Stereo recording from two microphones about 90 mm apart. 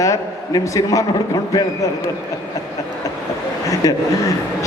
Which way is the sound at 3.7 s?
40° left (ahead or behind).